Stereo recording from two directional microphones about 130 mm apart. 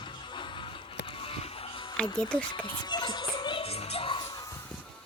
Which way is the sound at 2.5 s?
40° left (ahead or behind).